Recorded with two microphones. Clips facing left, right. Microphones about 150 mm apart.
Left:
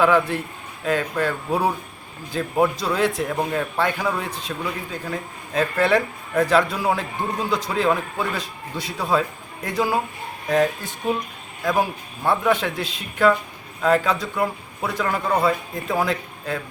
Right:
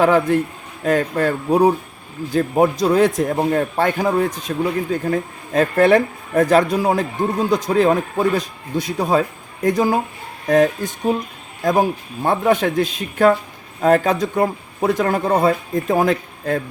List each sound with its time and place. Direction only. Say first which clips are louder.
0.0 s speech: right 4 dB; 40° right (ahead or behind)
2.3 s speech: right 5 dB; 45° right (ahead or behind)